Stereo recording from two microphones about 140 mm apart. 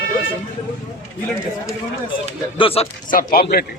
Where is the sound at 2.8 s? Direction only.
45° left (ahead or behind).